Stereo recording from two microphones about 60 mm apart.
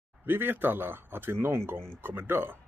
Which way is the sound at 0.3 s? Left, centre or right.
Right.